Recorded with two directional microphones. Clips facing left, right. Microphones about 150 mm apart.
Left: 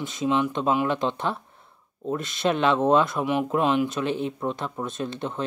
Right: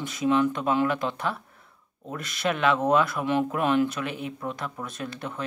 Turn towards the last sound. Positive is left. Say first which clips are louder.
# left 4 dB
turn(degrees=25)  # may be behind; listen again after turning